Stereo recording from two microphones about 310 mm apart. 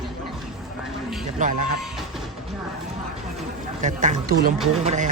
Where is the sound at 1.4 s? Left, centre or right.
Right.